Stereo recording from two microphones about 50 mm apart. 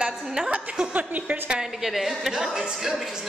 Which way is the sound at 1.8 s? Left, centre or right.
Centre.